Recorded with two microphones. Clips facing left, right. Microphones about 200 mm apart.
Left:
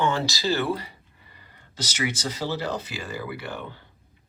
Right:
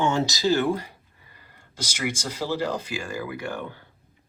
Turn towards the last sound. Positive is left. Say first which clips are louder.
# right 2 dB
turn(degrees=-10)  # may be behind; listen again after turning